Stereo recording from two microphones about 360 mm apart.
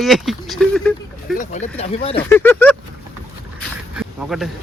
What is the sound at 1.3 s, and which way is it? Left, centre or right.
Speech, left.